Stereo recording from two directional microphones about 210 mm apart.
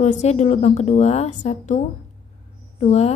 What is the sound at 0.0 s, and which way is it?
A woman's voice, 35° left (ahead or behind).